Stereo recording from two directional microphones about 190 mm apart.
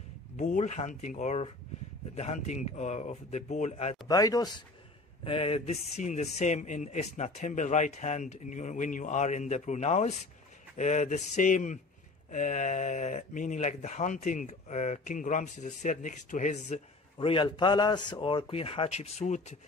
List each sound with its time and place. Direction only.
0.4 s speech: 40° left (ahead or behind)
4.1 s speech: 20° left (ahead or behind); by 19.5 s 35° left (ahead or behind)